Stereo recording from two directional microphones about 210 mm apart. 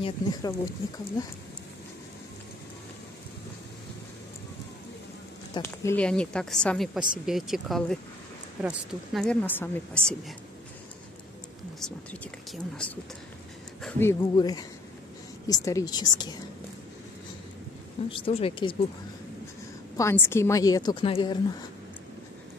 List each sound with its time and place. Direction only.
0.0 s a woman's voice: 15° left (ahead or behind)
5.5 s a woman's voice: 10° left (ahead or behind)
11.8 s a woman's voice: 5° left (ahead or behind); by 16.3 s 20° left (ahead or behind)
18.1 s a woman's voice: 25° left (ahead or behind)
20.0 s a woman's voice: 10° left (ahead or behind)